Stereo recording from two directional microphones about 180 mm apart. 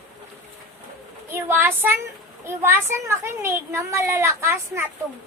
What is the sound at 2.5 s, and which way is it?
A child's voice, 15° right (ahead or behind).